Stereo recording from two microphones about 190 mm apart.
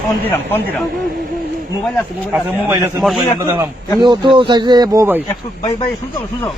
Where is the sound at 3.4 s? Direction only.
15° right (ahead or behind).